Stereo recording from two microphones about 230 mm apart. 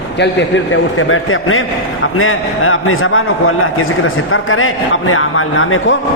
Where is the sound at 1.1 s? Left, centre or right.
Left.